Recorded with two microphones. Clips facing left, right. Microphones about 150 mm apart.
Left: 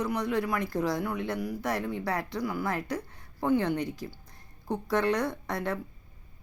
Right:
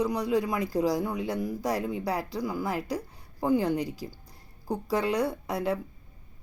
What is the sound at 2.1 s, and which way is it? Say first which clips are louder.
Speech: right 1 dB; 35° right (ahead or behind).